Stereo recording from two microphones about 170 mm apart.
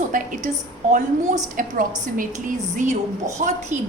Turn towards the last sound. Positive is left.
turn(degrees=-45)  # may be behind; listen again after turning